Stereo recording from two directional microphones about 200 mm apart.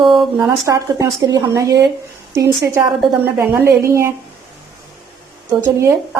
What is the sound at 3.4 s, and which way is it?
Speech, 15° right (ahead or behind).